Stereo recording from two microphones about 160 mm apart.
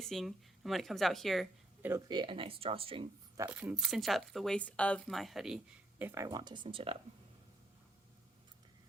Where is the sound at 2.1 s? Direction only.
30° right (ahead or behind).